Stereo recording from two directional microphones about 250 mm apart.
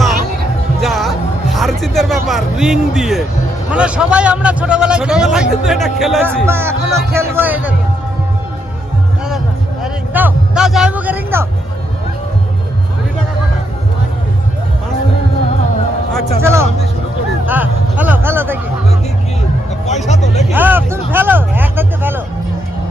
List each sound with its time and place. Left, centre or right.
0.8 s music: centre
3.7 s a man's voice: centre
6.5 s speech: centre
9.8 s a man's voice: centre
16.4 s speech: centre
20.1 s speech: left
20.5 s speech: centre